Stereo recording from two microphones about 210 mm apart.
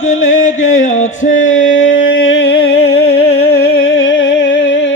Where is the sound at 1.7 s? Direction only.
60° left (ahead or behind).